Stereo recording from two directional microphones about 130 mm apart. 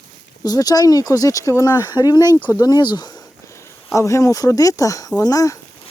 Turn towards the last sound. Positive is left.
turn(degrees=25)  # may be behind; listen again after turning